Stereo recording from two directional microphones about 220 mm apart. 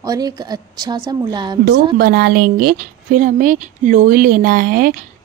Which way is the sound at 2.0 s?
45° right (ahead or behind).